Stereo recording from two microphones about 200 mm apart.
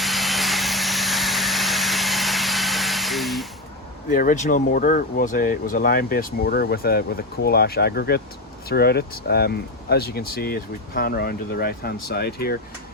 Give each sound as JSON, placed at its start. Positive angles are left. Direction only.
{"t": 0.0, "sound": "vehicle", "side_deg": 0}
{"t": 4.1, "sound": "speech", "side_deg": 40}